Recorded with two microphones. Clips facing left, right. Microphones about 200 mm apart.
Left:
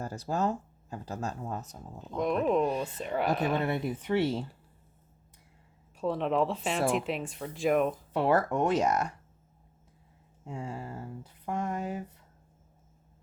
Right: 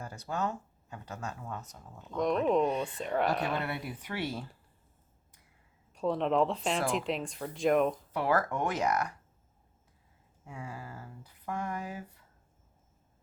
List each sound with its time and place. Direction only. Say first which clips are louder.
0.0 s speech: left 4 dB; 35° left (ahead or behind)
2.1 s speech: even; 5° left (ahead or behind)
3.7 s speech: left 8 dB; 25° left (ahead or behind)
6.0 s speech: even; centre (ahead or behind)
8.1 s speech: left 3 dB; 25° left (ahead or behind)
10.4 s speech: left 5 dB; 25° left (ahead or behind)